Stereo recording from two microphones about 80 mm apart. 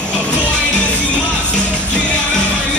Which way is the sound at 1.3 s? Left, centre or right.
Centre.